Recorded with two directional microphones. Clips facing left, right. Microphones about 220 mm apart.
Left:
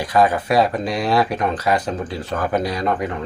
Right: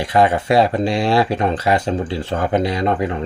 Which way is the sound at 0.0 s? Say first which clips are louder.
Right 1 dB; 25° right (ahead or behind).